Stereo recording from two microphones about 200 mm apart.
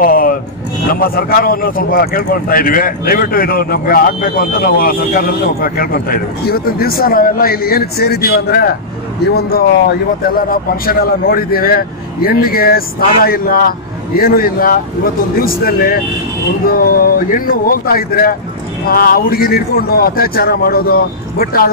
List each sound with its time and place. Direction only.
0.0 s a man's voice: 45° left (ahead or behind)